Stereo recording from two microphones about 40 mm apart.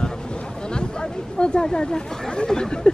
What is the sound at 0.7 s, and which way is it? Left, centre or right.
Chatter, left.